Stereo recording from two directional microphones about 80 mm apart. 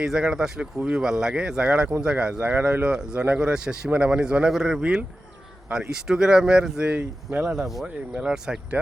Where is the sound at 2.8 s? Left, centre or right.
Centre.